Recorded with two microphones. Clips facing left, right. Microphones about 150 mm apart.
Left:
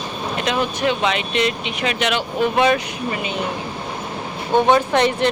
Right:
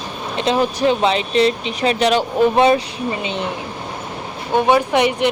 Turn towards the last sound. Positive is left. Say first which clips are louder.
# right 1 dB
turn(degrees=-15)  # may be behind; listen again after turning